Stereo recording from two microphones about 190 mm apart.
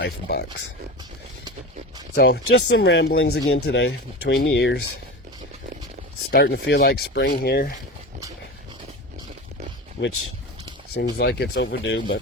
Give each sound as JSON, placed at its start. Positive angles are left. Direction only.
{"t": 0.0, "sound": "speech", "side_deg": 60}
{"t": 2.1, "sound": "speech", "side_deg": 60}
{"t": 6.3, "sound": "speech", "side_deg": 60}
{"t": 11.2, "sound": "speech", "side_deg": 60}